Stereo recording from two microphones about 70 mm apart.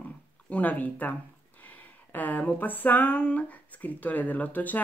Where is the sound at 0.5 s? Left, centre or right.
Left.